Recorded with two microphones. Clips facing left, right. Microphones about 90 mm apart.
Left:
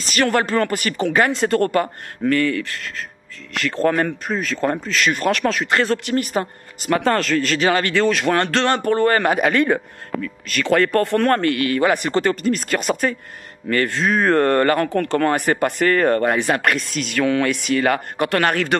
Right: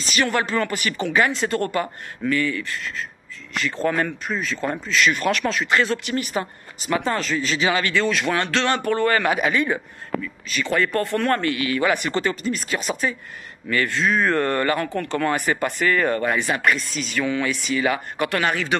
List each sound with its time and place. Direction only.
0.0 s speech: 50° left (ahead or behind)
9.5 s speech: 60° left (ahead or behind)
13.7 s speech: 45° left (ahead or behind)